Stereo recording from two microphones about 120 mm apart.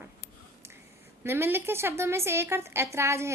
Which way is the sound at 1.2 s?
20° right (ahead or behind).